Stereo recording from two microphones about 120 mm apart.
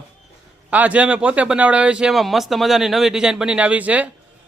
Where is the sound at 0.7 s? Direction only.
10° right (ahead or behind).